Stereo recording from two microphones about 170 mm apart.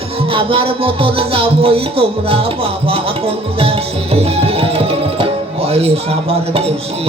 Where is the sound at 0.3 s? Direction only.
30° right (ahead or behind).